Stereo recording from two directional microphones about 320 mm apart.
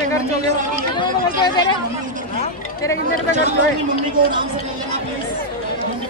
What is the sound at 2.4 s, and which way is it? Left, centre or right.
Chatter, centre.